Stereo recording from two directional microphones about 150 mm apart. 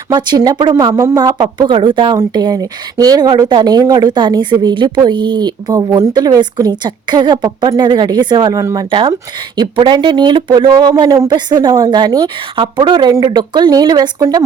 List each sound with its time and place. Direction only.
0.1 s a woman's voice: 30° right (ahead or behind)